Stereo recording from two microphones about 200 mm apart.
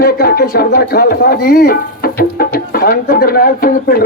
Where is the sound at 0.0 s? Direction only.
50° left (ahead or behind).